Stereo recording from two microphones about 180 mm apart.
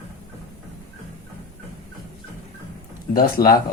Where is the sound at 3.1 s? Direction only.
55° left (ahead or behind).